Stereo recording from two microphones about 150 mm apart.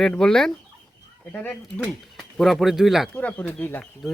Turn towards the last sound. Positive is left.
turn(degrees=15)  # may be behind; listen again after turning